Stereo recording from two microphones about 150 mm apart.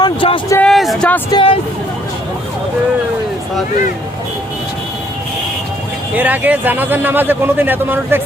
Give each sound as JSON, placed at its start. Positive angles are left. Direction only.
{"t": 0.0, "sound": "a sound", "side_deg": 35}
{"t": 0.6, "sound": "speech", "side_deg": 0}
{"t": 1.3, "sound": "speech", "side_deg": 35}
{"t": 6.1, "sound": "a man's voice", "side_deg": -10}